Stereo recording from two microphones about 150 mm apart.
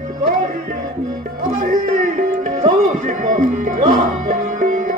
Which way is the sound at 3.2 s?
60° right (ahead or behind).